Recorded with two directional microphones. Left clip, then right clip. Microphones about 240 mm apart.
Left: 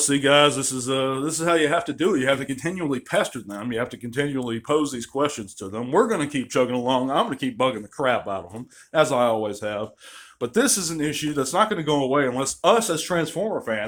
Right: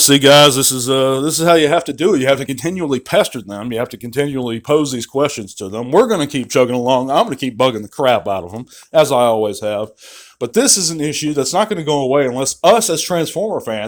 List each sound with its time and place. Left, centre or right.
0.0 s speech: right